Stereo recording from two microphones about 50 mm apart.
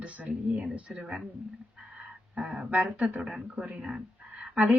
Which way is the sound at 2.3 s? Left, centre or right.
Centre.